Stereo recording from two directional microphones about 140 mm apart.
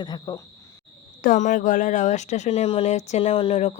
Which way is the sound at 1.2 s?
65° left (ahead or behind).